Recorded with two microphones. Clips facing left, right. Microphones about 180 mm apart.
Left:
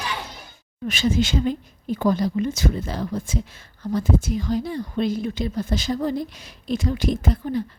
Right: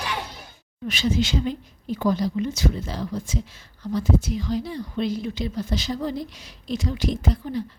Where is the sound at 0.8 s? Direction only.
50° left (ahead or behind).